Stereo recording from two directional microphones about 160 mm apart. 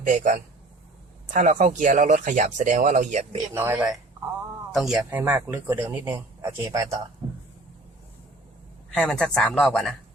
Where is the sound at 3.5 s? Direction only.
15° right (ahead or behind).